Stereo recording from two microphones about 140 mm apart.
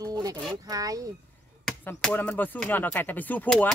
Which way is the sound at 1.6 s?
10° left (ahead or behind).